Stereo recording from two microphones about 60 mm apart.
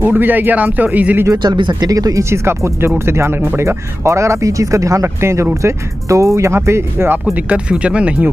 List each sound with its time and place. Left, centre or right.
0.0 s speech: right
1.2 s speech: right
2.2 s speech: right
4.0 s speech: right
5.0 s speech: right
7.3 s speech: right